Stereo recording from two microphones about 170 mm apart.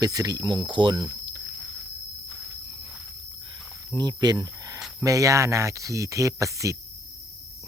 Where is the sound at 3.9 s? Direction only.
25° right (ahead or behind).